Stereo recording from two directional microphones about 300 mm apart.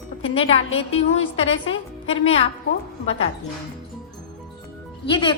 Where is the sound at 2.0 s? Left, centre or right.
Centre.